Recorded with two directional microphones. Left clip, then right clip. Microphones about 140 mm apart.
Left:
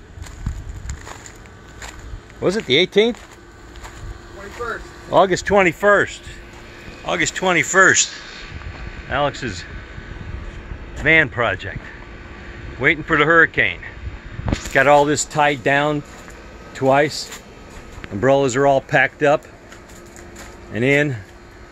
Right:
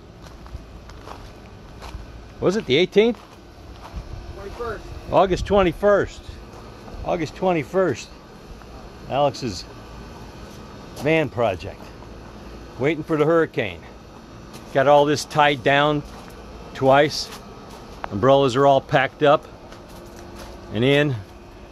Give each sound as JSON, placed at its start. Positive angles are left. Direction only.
{"t": 2.4, "sound": "speech", "side_deg": 5}
{"t": 5.1, "sound": "speech", "side_deg": 20}
{"t": 7.1, "sound": "speech", "side_deg": -5}
{"t": 9.1, "sound": "speech", "side_deg": -15}
{"t": 11.1, "sound": "speech", "side_deg": -15}
{"t": 12.8, "sound": "speech", "side_deg": -10}
{"t": 14.9, "sound": "speech", "side_deg": 50}
{"t": 18.2, "sound": "speech", "side_deg": 15}
{"t": 20.7, "sound": "speech", "side_deg": 15}